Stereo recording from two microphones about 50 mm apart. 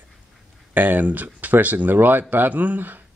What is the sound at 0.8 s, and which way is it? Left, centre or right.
Speech, right.